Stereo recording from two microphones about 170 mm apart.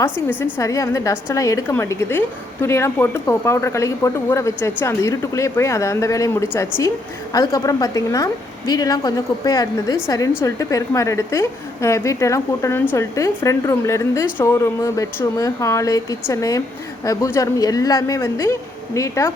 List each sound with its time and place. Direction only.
0.6 s a woman's voice: 20° left (ahead or behind)